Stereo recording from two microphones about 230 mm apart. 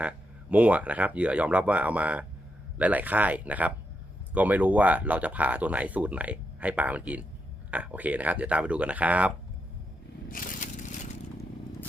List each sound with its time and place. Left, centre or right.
0.5 s speech: centre
10.2 s crushing: left